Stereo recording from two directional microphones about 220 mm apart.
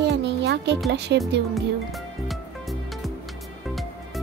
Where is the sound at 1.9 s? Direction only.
Centre (ahead or behind).